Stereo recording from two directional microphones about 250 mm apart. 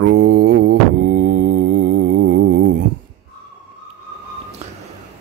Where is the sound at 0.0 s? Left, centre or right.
Right.